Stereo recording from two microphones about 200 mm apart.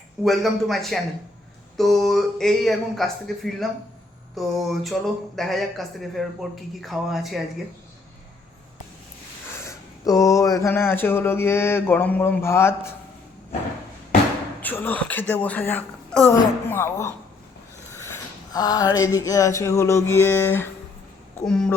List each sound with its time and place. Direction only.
0.3 s speech: centre (ahead or behind)
9.6 s speech: 15° left (ahead or behind)
14.6 s speech: 10° left (ahead or behind)
18.5 s speech: 20° left (ahead or behind)